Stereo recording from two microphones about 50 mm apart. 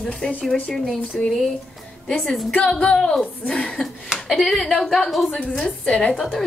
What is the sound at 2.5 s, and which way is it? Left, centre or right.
A woman's voice, left.